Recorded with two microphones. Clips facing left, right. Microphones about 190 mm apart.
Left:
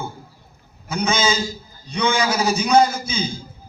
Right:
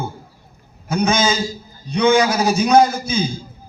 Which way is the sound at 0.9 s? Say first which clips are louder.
Right 3 dB; 45° right (ahead or behind).